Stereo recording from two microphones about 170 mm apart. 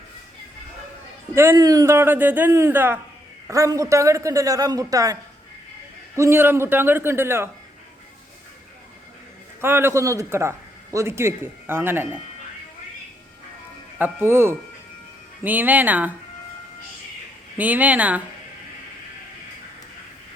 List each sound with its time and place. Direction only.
1.4 s a man's voice: 20° right (ahead or behind)
6.1 s a man's voice: 15° right (ahead or behind)
9.6 s a man's voice: 15° right (ahead or behind)
14.0 s a man's voice: 15° right (ahead or behind)
17.6 s a man's voice: 10° right (ahead or behind)